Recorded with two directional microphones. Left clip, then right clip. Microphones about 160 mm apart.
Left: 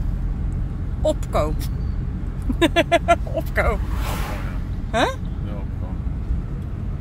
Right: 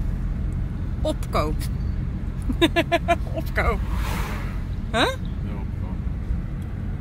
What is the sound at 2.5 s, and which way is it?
Speech, 15° left (ahead or behind).